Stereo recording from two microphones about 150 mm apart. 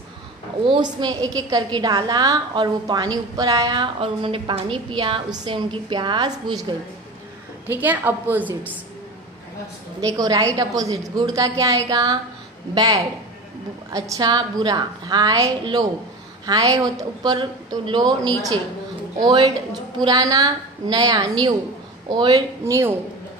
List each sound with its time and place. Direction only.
0.7 s a woman's voice: 30° right (ahead or behind)
7.7 s a woman's voice: 10° right (ahead or behind)
9.9 s a woman's voice: 25° right (ahead or behind)